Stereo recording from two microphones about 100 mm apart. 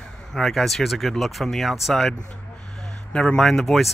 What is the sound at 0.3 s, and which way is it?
Speech, 5° left (ahead or behind).